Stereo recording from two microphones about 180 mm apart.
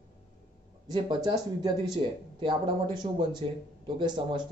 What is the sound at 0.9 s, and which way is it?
Speech, 20° right (ahead or behind).